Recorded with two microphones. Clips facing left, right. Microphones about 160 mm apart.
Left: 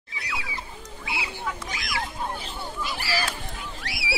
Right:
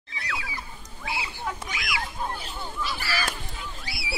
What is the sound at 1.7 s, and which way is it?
Fowl, 40° left (ahead or behind).